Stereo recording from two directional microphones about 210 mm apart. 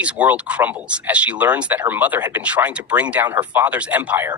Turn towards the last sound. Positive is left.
turn(degrees=-10)  # may be behind; listen again after turning